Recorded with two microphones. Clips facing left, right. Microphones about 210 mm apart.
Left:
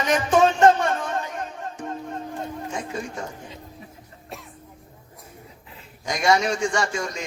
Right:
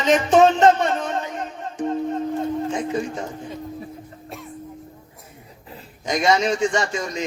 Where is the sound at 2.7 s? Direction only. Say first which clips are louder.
Right 7 dB; 20° right (ahead or behind).